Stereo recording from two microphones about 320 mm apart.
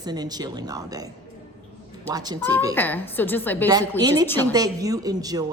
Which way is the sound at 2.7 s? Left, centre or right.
Centre.